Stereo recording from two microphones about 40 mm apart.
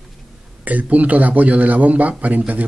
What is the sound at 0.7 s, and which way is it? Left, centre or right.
A man's voice, right.